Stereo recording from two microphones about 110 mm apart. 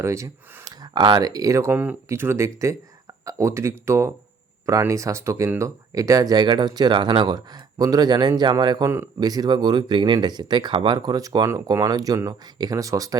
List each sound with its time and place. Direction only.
0.0 s speech: 25° right (ahead or behind)
1.7 s speech: 15° right (ahead or behind); by 7.3 s 50° right (ahead or behind)
7.3 s speech: 35° right (ahead or behind)